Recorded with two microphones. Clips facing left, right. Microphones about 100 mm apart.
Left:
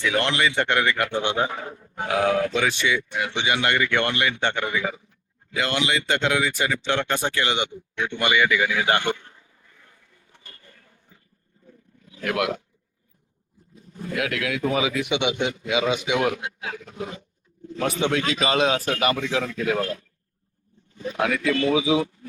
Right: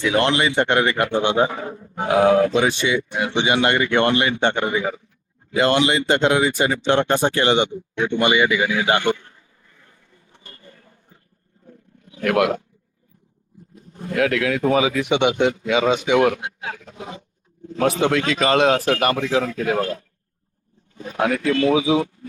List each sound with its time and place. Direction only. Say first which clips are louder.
0.0 s speech: right 4 dB; 25° right (ahead or behind)
10.3 s a sound: right 4 dB; 20° right (ahead or behind)
12.1 s speech: right 6 dB; 55° right (ahead or behind)
13.7 s speech: right 6 dB; 50° right (ahead or behind)
17.7 s speech: right 5 dB; 45° right (ahead or behind)
21.0 s speech: right 3 dB; 40° right (ahead or behind)